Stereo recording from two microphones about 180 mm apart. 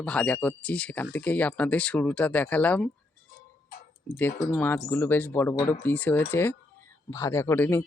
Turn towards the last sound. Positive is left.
turn(degrees=15)  # may be behind; listen again after turning